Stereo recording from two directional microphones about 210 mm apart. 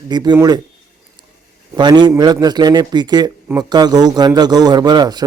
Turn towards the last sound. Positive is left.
turn(degrees=-20)  # may be behind; listen again after turning